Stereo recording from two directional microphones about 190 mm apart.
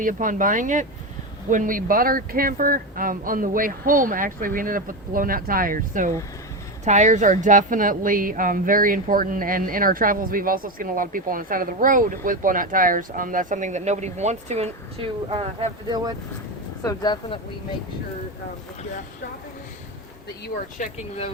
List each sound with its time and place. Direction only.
0.0 s a woman's voice: 45° right (ahead or behind); by 16.1 s 25° right (ahead or behind)
16.8 s speech: 20° left (ahead or behind)
20.7 s speech: 40° left (ahead or behind)